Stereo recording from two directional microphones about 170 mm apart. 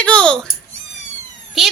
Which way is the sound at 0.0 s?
5° left (ahead or behind).